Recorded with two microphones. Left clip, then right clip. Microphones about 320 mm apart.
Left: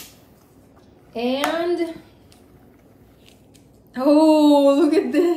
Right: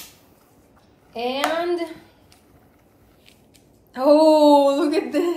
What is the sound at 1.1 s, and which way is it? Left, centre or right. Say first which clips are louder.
Speech: left 1 dB; centre.